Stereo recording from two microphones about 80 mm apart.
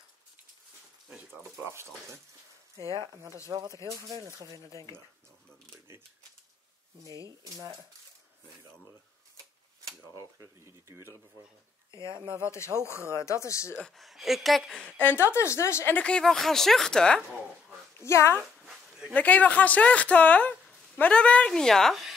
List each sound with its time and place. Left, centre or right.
1.6 s speech: right
3.4 s speech: right
10.4 s speech: right
11.9 s speech: right
12.4 s speech: left
13.8 s speech: centre
15.0 s speech: left
16.0 s speech: centre
17.9 s speech: left
19.1 s speech: centre